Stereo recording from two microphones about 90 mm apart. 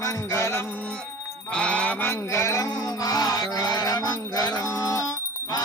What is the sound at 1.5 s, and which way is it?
Music, 10° left (ahead or behind).